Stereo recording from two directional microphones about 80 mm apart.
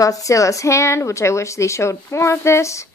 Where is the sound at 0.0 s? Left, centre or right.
Left.